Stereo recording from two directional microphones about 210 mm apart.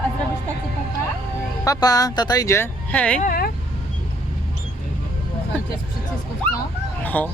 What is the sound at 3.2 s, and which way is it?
Speech, 45° left (ahead or behind).